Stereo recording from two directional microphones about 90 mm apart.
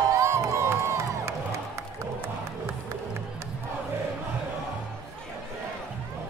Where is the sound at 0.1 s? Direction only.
35° right (ahead or behind).